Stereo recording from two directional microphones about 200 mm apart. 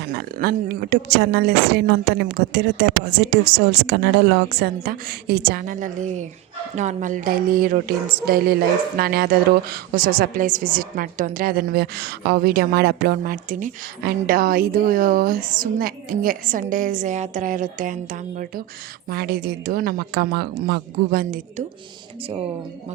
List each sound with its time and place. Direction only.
0.2 s a woman's voice: 50° right (ahead or behind)